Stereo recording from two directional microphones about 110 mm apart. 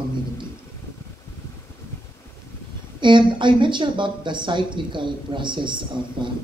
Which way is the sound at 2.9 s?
45° right (ahead or behind).